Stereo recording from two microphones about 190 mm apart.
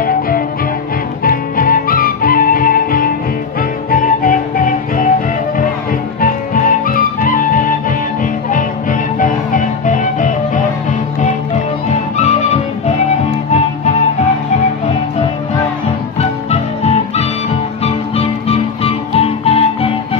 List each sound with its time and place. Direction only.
1.2 s music: 50° left (ahead or behind)
6.2 s music: 45° left (ahead or behind)
9.2 s music: 45° left (ahead or behind)
16.2 s music: 35° left (ahead or behind)